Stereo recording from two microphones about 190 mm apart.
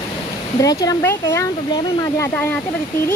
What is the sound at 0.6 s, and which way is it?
Speech, 20° left (ahead or behind).